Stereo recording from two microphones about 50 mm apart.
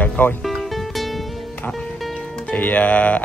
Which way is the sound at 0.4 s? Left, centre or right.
Centre.